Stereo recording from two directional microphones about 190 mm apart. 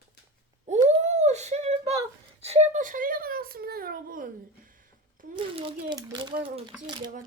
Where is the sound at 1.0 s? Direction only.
35° right (ahead or behind).